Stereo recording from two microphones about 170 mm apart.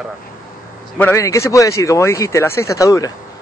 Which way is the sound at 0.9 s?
15° left (ahead or behind).